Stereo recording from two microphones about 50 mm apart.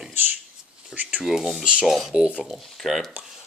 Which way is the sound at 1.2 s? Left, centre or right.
Centre.